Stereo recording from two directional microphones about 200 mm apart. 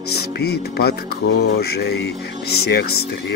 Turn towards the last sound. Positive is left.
turn(degrees=55)  # may be behind; listen again after turning